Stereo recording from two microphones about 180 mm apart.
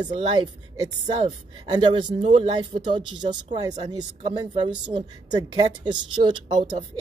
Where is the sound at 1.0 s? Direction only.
25° right (ahead or behind).